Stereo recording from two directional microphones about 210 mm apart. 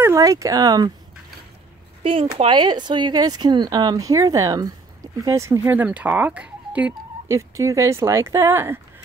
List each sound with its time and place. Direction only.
0.0 s speech: 15° right (ahead or behind)
2.0 s speech: 25° right (ahead or behind)